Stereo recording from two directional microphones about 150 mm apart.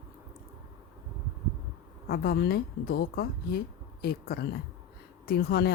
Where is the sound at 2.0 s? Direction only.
90° left.